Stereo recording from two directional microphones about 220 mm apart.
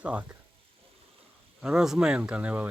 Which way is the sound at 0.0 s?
5° right (ahead or behind).